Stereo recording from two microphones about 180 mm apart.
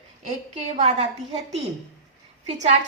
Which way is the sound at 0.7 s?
40° right (ahead or behind).